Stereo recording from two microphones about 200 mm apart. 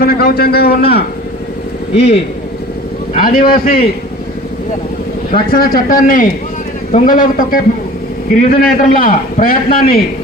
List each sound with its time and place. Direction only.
0.0 s a man's voice: 50° left (ahead or behind)
3.2 s a man's voice: 45° left (ahead or behind)
5.3 s a man's voice: 50° left (ahead or behind)